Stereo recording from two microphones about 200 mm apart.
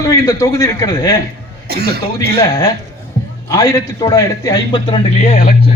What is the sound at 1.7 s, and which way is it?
Speech, 50° right (ahead or behind).